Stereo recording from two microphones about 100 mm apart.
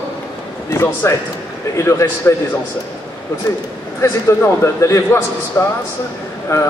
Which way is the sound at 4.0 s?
30° left (ahead or behind).